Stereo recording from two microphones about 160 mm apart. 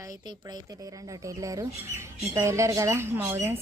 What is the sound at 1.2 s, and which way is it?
A woman's voice, 20° right (ahead or behind).